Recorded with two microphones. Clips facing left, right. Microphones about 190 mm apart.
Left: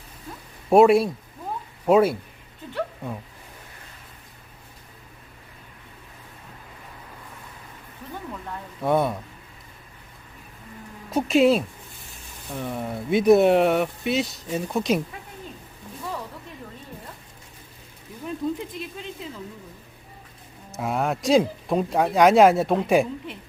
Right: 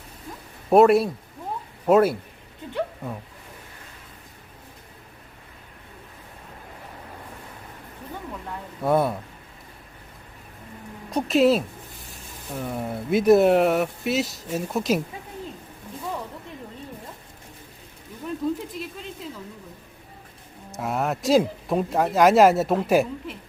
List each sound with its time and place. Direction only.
0.7 s speech: centre (ahead or behind)
8.8 s speech: centre (ahead or behind)
11.1 s speech: centre (ahead or behind)
18.4 s speech: centre (ahead or behind)
20.7 s speech: centre (ahead or behind)